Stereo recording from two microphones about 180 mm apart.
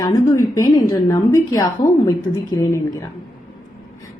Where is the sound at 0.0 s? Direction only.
20° left (ahead or behind).